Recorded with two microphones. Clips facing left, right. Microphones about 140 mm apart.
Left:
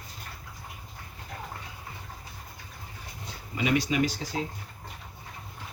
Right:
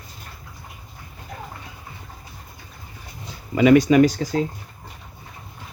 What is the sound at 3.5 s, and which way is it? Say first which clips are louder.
Speech: right 13 dB; 55° right (ahead or behind).